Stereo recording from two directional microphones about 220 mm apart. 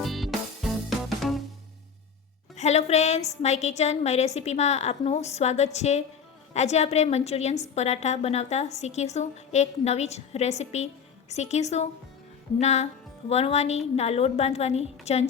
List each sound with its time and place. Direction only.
0.0 s music: centre (ahead or behind)
2.6 s a woman's voice: 30° left (ahead or behind)